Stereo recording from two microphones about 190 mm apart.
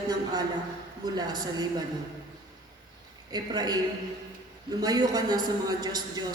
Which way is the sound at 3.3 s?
20° right (ahead or behind).